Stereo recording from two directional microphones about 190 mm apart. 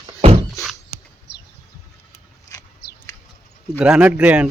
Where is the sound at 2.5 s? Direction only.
15° left (ahead or behind).